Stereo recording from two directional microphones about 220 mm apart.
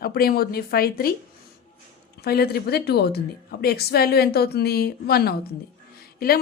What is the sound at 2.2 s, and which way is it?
Speech, 45° left (ahead or behind).